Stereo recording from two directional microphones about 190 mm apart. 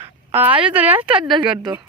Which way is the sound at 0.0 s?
10° right (ahead or behind).